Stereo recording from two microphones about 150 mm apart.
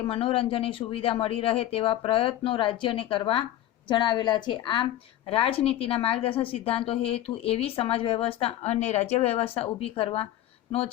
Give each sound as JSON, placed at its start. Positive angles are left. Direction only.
{"t": 0.0, "sound": "a woman's voice", "side_deg": 35}